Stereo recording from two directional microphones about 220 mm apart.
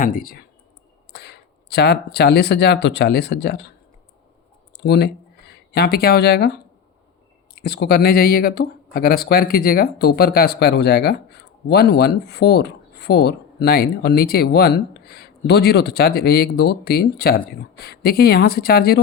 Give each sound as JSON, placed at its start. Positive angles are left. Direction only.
{"t": 0.0, "sound": "speech", "side_deg": 40}
{"t": 4.8, "sound": "speech", "side_deg": 50}
{"t": 7.5, "sound": "speech", "side_deg": 45}